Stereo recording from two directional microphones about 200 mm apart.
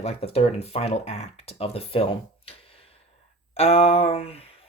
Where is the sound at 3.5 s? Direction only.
30° left (ahead or behind).